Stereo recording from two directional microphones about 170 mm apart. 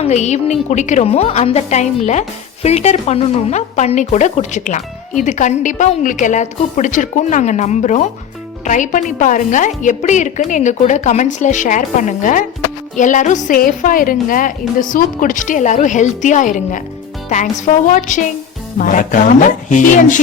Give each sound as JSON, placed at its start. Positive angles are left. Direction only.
{"t": 0.0, "sound": "speech", "side_deg": 40}